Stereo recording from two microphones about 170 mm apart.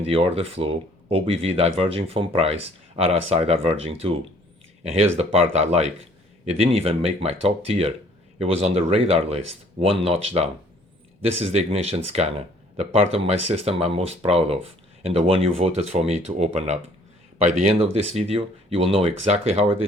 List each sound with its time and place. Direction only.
0.0 s speech: 35° right (ahead or behind)